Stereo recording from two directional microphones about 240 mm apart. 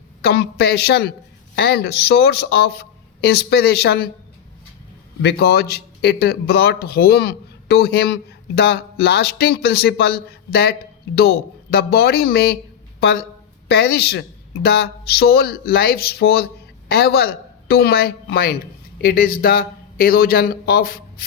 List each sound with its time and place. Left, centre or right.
0.2 s speech: left
5.2 s speech: left